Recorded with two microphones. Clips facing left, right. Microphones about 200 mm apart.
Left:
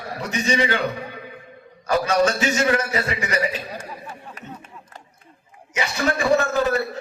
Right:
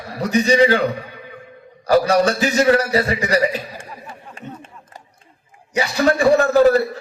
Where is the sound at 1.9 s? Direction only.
35° right (ahead or behind).